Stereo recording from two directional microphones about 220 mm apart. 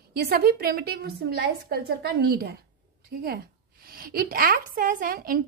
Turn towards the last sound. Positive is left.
turn(degrees=-40)  # may be behind; listen again after turning